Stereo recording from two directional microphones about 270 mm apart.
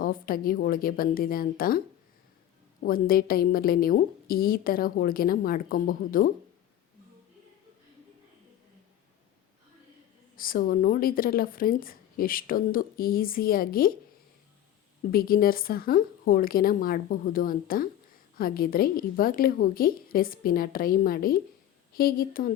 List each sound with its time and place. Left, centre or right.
0.0 s a woman's voice: left
2.8 s a woman's voice: left
10.3 s a woman's voice: left
15.1 s a woman's voice: left